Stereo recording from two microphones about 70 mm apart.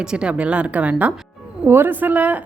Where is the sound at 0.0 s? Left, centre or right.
Centre.